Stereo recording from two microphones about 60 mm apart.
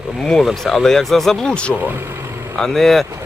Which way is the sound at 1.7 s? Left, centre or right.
Right.